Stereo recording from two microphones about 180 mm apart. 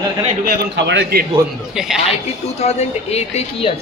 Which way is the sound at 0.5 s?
65° right (ahead or behind).